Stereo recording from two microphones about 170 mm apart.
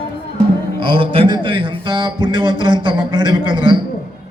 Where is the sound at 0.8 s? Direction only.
30° right (ahead or behind).